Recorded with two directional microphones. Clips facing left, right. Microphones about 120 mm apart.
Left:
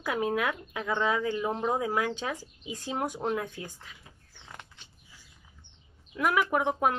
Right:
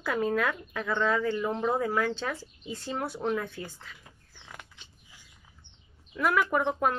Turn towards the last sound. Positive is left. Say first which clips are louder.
# even
turn(degrees=10)  # may be behind; listen again after turning